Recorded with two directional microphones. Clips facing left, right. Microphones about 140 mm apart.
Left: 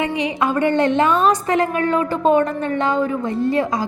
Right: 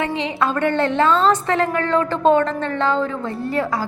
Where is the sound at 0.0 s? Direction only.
15° left (ahead or behind).